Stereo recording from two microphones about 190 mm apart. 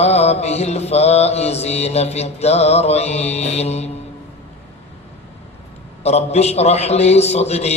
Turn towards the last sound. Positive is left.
turn(degrees=35)  # may be behind; listen again after turning